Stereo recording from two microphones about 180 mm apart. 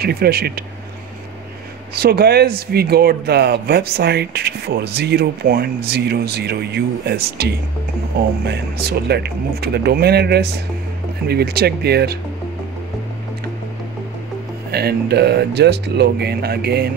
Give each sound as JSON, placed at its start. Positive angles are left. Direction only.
{"t": 0.0, "sound": "speech", "side_deg": -60}
{"t": 2.0, "sound": "speech", "side_deg": -60}
{"t": 14.7, "sound": "speech", "side_deg": -60}